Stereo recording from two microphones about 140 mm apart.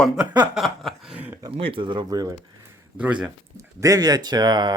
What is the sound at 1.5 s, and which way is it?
Speech, 40° right (ahead or behind).